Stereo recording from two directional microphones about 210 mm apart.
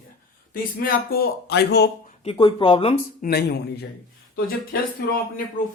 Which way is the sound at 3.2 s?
50° left (ahead or behind).